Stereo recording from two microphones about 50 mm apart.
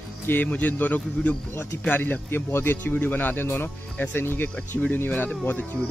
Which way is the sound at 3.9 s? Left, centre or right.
Left.